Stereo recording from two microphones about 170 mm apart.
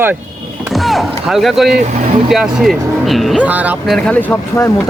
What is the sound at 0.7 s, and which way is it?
Speech, centre (ahead or behind).